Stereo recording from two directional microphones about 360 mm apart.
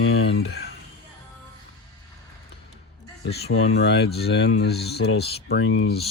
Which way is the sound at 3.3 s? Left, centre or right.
Left.